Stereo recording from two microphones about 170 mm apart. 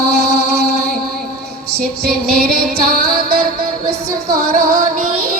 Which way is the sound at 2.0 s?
65° right (ahead or behind).